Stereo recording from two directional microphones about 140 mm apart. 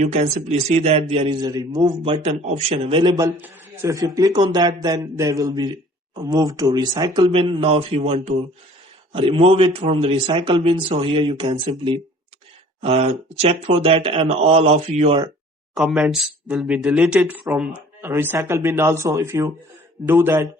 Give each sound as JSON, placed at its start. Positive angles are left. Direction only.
{"t": 0.0, "sound": "speech", "side_deg": -50}
{"t": 1.4, "sound": "speech", "side_deg": -30}
{"t": 2.1, "sound": "speech", "side_deg": -45}
{"t": 3.0, "sound": "a man's voice", "side_deg": -30}
{"t": 3.3, "sound": "a man's voice", "side_deg": -15}
{"t": 12.8, "sound": "speech", "side_deg": -50}
{"t": 15.7, "sound": "speech", "side_deg": -5}